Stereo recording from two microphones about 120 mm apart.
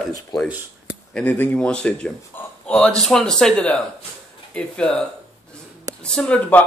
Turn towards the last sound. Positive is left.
turn(degrees=10)  # may be behind; listen again after turning